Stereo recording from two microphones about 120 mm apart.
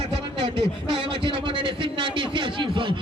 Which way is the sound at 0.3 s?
45° right (ahead or behind).